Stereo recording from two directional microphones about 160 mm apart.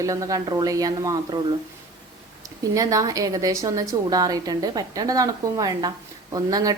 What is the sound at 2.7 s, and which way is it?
A woman's voice, 20° right (ahead or behind).